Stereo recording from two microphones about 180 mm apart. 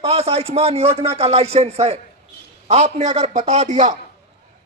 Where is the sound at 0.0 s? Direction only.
35° right (ahead or behind).